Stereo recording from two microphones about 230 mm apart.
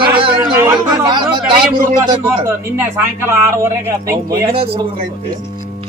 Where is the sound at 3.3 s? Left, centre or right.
Centre.